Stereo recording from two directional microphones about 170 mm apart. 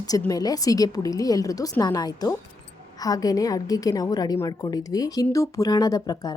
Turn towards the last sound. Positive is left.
turn(degrees=20)  # may be behind; listen again after turning